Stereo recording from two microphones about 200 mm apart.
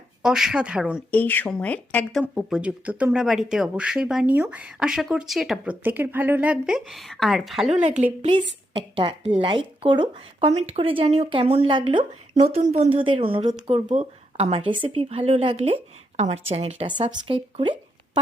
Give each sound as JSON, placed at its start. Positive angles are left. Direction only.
{"t": 0.2, "sound": "speech", "side_deg": -5}
{"t": 1.1, "sound": "a woman's voice", "side_deg": 10}
{"t": 2.2, "sound": "speech", "side_deg": -5}
{"t": 8.2, "sound": "a woman's voice", "side_deg": -25}